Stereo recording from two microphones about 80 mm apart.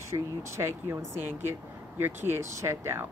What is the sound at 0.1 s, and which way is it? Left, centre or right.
Speech, right.